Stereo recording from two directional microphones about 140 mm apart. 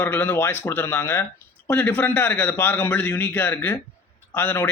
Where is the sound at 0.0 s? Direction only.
15° left (ahead or behind).